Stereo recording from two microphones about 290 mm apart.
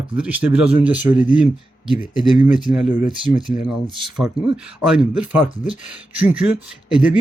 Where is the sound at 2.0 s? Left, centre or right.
Left.